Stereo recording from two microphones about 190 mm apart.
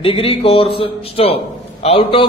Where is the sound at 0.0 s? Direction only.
30° left (ahead or behind).